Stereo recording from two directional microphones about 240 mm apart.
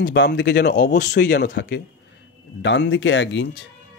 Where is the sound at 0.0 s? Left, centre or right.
Left.